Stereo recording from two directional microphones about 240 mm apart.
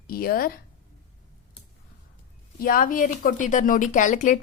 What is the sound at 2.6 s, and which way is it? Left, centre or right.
Speech, left.